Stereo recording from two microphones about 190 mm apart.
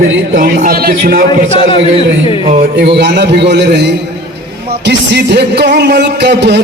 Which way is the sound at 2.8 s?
60° right (ahead or behind).